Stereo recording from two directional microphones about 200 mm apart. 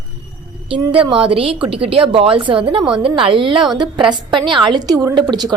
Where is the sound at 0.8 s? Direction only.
20° right (ahead or behind).